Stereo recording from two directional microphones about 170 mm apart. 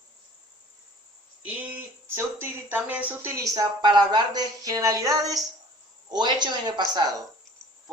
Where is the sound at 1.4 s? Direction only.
10° right (ahead or behind).